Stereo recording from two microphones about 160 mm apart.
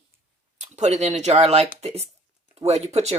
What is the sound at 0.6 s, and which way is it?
Speech, 45° right (ahead or behind).